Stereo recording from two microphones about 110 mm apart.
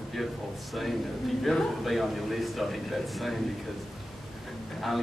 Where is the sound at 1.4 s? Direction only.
Centre (ahead or behind).